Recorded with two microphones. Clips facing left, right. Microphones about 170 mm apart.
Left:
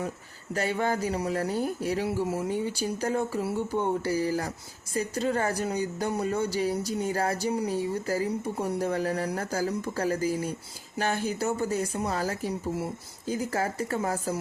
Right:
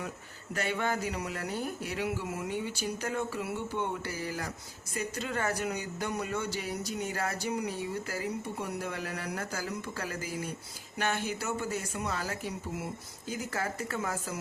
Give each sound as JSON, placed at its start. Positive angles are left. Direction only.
{"t": 0.5, "sound": "a woman's voice", "side_deg": 35}